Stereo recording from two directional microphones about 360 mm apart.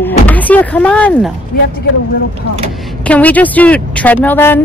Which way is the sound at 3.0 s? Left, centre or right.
Centre.